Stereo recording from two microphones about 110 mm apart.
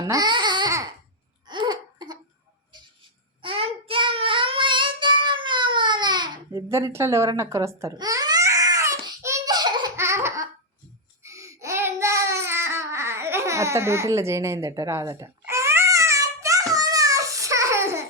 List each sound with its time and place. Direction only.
0.0 s babbling: 35° right (ahead or behind)
1.5 s laughter: 40° right (ahead or behind)
2.7 s a sound: 45° right (ahead or behind)
3.4 s child singing: 60° right (ahead or behind); by 6.4 s 40° right (ahead or behind)
6.7 s a woman's voice: 25° right (ahead or behind)
7.9 s babbling: 35° right (ahead or behind)
10.0 s laughter: 25° right (ahead or behind)
11.2 s child singing: 30° right (ahead or behind)